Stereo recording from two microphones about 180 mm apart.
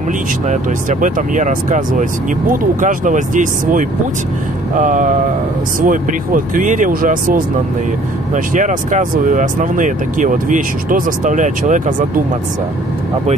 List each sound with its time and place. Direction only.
0.5 s speech: 45° right (ahead or behind)
8.5 s speech: 45° right (ahead or behind)